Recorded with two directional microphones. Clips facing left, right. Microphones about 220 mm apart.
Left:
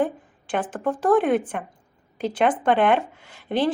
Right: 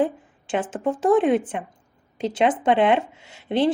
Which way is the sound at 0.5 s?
25° right (ahead or behind).